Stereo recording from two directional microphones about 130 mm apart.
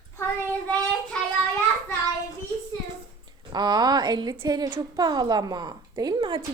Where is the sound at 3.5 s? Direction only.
30° right (ahead or behind).